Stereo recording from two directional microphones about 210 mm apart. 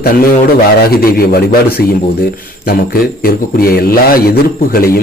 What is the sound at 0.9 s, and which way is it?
Speech, 45° left (ahead or behind).